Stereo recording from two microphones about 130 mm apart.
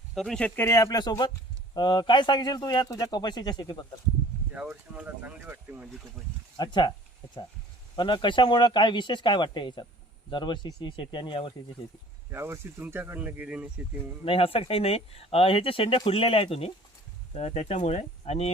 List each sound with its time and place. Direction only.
0.1 s a man's voice: centre (ahead or behind); by 3.8 s 35° left (ahead or behind)
4.5 s speech: 10° right (ahead or behind)
6.6 s a man's voice: 35° left (ahead or behind)
7.9 s a man's voice: 35° left (ahead or behind)
12.3 s speech: 20° right (ahead or behind)
14.3 s speech: 45° left (ahead or behind)